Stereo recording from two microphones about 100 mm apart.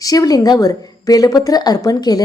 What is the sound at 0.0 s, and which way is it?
Speech, 40° left (ahead or behind).